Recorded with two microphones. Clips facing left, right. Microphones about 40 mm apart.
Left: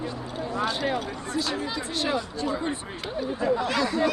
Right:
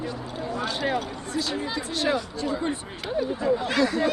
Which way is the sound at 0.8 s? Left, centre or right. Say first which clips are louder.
Right 1 dB; centre.